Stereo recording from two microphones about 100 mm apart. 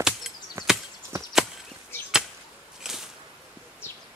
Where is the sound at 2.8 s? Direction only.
5° right (ahead or behind).